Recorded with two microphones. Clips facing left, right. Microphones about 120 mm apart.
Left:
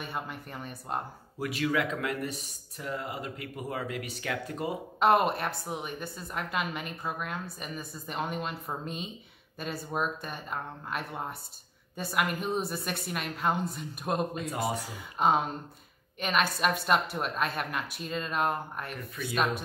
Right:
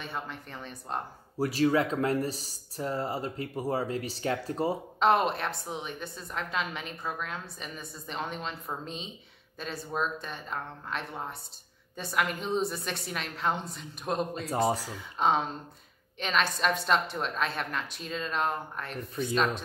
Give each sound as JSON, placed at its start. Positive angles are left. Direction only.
{"t": 0.0, "sound": "speech", "side_deg": 5}
{"t": 1.4, "sound": "speech", "side_deg": -35}
{"t": 5.0, "sound": "a woman's voice", "side_deg": 5}
{"t": 14.5, "sound": "speech", "side_deg": -30}
{"t": 14.8, "sound": "a woman's voice", "side_deg": 5}